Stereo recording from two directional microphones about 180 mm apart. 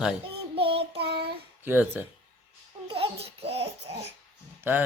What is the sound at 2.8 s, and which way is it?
Babbling, 30° right (ahead or behind).